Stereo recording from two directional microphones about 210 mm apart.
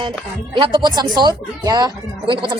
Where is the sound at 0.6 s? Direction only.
20° right (ahead or behind).